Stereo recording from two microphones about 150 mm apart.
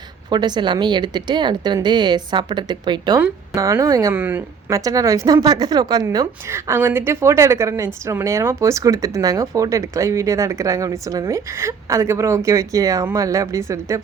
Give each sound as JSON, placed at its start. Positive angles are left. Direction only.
{"t": 0.3, "sound": "a woman's voice", "side_deg": -30}
{"t": 4.2, "sound": "a woman's voice", "side_deg": -10}
{"t": 4.8, "sound": "speech", "side_deg": -25}